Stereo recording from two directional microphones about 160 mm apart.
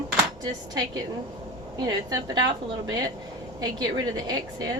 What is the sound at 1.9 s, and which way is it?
Speech, 30° right (ahead or behind).